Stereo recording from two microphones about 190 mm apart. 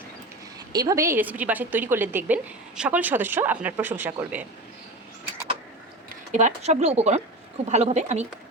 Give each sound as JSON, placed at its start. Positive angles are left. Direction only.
{"t": 0.7, "sound": "a woman's voice", "side_deg": -20}
{"t": 6.3, "sound": "speech", "side_deg": -35}